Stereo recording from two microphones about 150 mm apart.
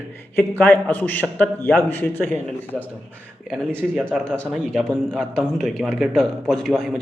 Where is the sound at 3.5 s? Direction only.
5° left (ahead or behind).